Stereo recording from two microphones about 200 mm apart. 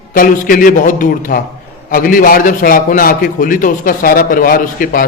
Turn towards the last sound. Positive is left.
turn(degrees=45)  # may be behind; listen again after turning